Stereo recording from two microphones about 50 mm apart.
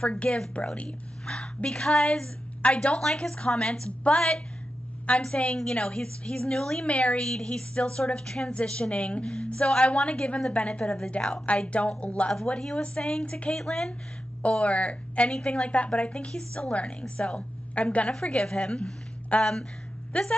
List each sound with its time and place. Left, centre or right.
0.0 s a woman's voice: left
5.0 s a woman's voice: left
7.2 s a woman's voice: centre
12.5 s a woman's voice: centre
13.6 s a woman's voice: centre
14.4 s a woman's voice: left